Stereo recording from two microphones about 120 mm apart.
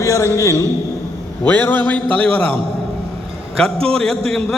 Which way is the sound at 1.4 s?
15° left (ahead or behind).